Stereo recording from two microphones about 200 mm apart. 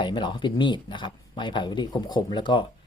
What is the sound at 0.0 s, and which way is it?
Speech, 25° left (ahead or behind).